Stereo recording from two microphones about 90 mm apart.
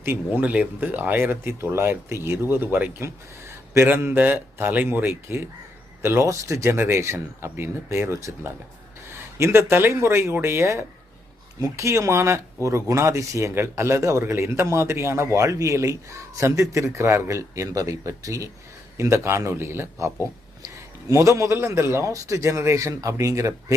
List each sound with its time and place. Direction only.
0.0 s speech: 20° right (ahead or behind)